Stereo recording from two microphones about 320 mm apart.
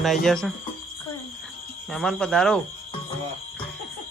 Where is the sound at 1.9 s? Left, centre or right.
Centre.